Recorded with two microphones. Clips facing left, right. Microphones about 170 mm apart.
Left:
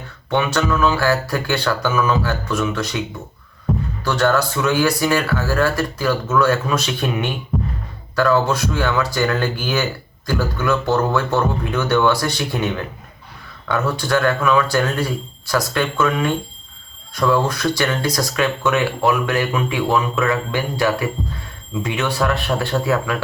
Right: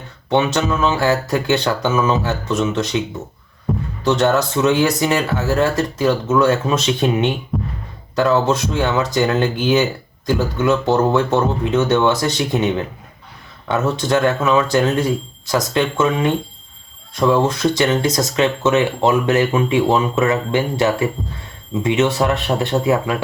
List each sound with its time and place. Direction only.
0.3 s speech: 20° right (ahead or behind)
3.7 s heart sounds: centre (ahead or behind)
4.0 s speech: 20° right (ahead or behind)
7.5 s music: centre (ahead or behind)
8.1 s speech: 20° right (ahead or behind)